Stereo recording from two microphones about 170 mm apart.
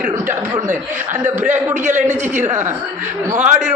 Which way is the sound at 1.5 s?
15° right (ahead or behind).